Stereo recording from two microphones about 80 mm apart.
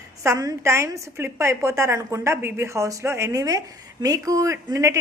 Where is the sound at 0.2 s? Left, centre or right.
Right.